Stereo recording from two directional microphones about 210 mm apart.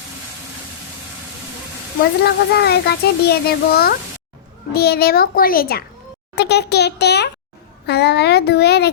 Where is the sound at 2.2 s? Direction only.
50° left (ahead or behind).